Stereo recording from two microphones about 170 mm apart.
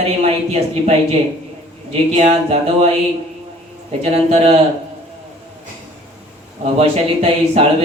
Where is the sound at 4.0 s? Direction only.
35° right (ahead or behind).